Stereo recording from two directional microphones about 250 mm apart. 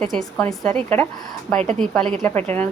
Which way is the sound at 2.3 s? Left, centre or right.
Right.